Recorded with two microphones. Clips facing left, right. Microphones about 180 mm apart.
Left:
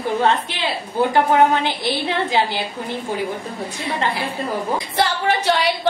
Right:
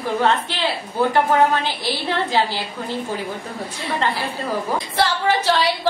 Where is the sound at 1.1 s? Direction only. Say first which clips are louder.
Left 2 dB; 20° left (ahead or behind).